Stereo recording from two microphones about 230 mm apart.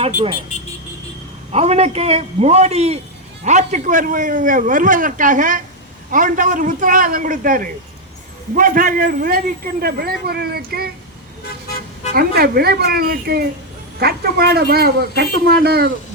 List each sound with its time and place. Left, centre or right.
1.5 s a man's voice: right
12.1 s speech: right